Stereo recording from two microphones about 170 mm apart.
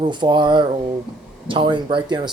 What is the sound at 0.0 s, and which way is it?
Speech, 25° right (ahead or behind).